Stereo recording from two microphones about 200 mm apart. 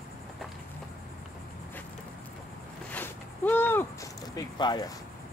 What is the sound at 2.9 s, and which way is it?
Zipper, 10° left (ahead or behind).